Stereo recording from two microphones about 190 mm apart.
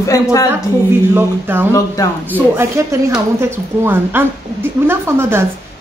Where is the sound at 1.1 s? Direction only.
10° right (ahead or behind).